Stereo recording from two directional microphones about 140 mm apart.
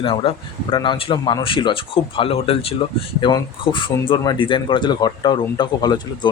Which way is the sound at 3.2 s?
35° left (ahead or behind).